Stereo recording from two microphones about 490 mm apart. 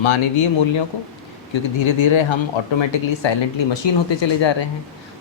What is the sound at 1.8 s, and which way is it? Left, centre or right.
Speech, left.